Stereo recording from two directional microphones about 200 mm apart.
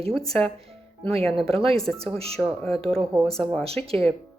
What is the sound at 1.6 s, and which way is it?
Speech, centre (ahead or behind).